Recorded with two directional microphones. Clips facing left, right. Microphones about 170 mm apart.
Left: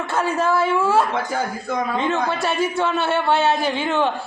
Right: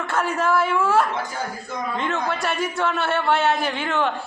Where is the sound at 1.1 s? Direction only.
60° left (ahead or behind).